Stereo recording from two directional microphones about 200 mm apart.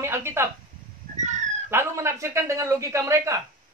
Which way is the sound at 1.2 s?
35° right (ahead or behind).